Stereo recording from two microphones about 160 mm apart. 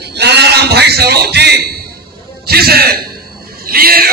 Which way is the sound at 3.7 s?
70° right (ahead or behind).